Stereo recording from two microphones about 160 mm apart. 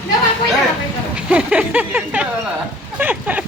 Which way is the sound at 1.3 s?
5° right (ahead or behind).